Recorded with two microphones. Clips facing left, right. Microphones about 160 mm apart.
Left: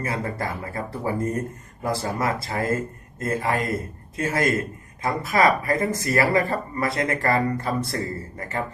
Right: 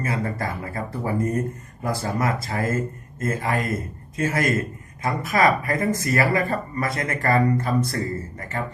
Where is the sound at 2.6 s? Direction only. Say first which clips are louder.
Even; 25° right (ahead or behind).